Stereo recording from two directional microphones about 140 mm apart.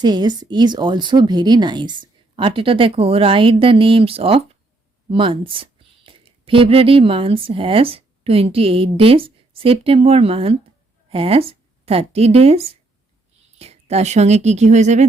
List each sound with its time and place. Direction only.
0.0 s speech: 30° right (ahead or behind); by 15.0 s 55° right (ahead or behind)